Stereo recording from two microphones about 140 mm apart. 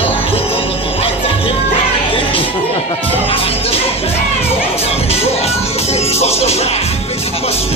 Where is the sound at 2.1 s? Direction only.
40° left (ahead or behind).